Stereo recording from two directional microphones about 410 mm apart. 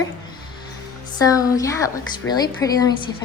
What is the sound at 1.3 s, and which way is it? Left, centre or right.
Speech, centre.